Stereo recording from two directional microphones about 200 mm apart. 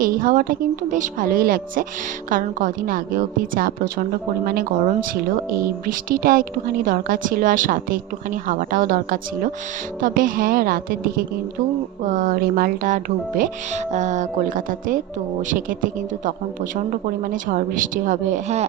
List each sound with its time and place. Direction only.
0.0 s speech: 45° right (ahead or behind)
17.5 s speech: 40° right (ahead or behind)